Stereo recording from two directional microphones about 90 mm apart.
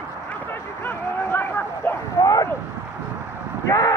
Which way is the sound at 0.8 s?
25° left (ahead or behind).